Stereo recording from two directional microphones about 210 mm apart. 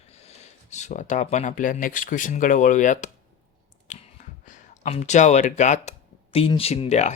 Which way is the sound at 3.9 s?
35° left (ahead or behind).